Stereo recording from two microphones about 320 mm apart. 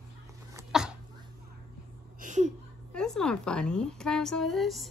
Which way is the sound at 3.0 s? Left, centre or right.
Centre.